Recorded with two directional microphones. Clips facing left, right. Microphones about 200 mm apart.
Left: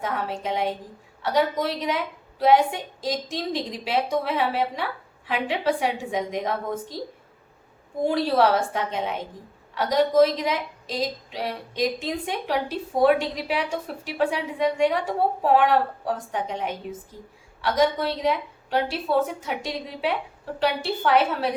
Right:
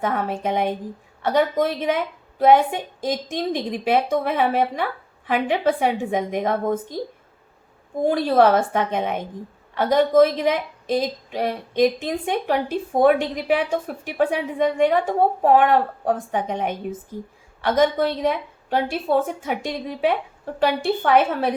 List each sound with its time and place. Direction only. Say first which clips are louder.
0.0 s a woman's voice: right 5 dB; 55° right (ahead or behind)
8.1 s a woman's voice: right 4 dB; 50° right (ahead or behind)